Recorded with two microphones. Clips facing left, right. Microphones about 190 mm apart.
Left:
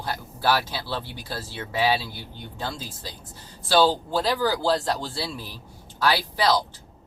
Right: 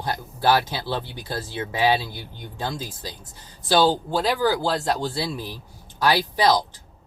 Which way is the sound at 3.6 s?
15° right (ahead or behind).